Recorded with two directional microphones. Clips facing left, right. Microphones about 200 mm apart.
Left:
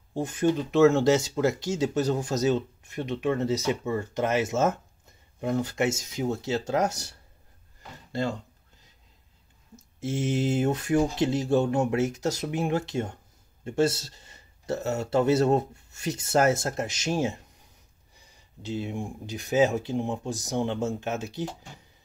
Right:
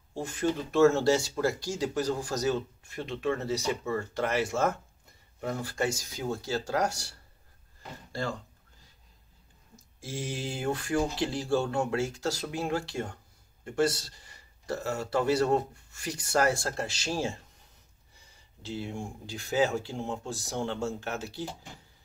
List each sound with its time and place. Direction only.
0.1 s speech: 20° left (ahead or behind)
9.8 s speech: 20° left (ahead or behind)